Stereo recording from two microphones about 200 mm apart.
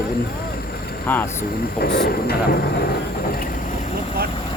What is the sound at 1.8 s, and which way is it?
Speech, 55° left (ahead or behind).